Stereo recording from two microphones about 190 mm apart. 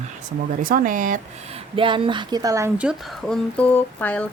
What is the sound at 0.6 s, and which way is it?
Speech, 50° right (ahead or behind).